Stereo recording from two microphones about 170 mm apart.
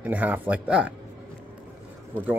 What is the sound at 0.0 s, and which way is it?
Speech, 10° right (ahead or behind).